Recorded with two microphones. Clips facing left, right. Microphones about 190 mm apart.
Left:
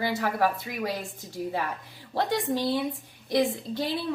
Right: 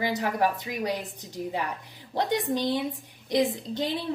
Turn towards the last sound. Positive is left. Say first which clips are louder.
# even
turn(degrees=-20)  # may be behind; listen again after turning